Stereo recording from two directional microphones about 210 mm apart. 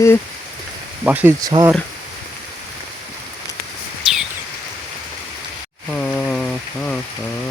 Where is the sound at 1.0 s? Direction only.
10° right (ahead or behind).